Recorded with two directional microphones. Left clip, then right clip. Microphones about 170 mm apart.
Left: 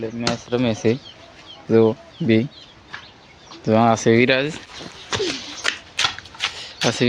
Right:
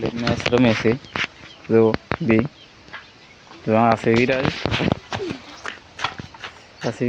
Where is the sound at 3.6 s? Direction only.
15° left (ahead or behind).